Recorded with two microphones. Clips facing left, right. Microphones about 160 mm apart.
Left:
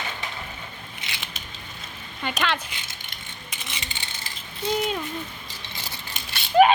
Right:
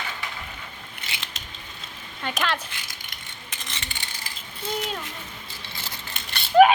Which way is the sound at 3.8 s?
20° left (ahead or behind).